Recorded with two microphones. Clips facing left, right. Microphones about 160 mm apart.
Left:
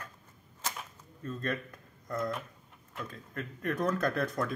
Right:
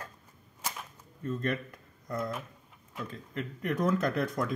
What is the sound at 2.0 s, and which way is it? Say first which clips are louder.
Speech: even; 20° right (ahead or behind).